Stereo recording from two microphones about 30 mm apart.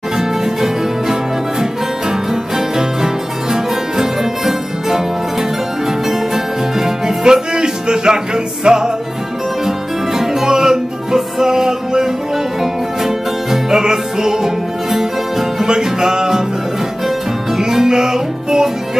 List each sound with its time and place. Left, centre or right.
0.2 s music: centre
2.5 s music: centre
17.5 s music: centre